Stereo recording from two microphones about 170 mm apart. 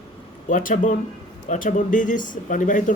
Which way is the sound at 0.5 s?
50° left (ahead or behind).